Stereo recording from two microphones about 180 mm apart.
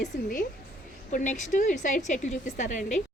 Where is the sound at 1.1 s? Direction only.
45° left (ahead or behind).